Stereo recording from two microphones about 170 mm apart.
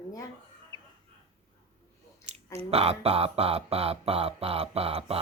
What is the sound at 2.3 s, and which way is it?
Chewing, 40° right (ahead or behind).